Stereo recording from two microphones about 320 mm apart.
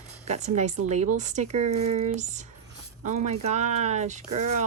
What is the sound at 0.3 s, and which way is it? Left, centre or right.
Speech, right.